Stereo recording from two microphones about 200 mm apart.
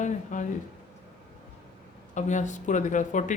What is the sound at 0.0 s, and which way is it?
Speech, 40° left (ahead or behind).